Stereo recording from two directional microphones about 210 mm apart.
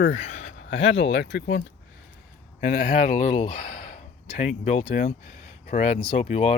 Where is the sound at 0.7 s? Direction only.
60° left (ahead or behind).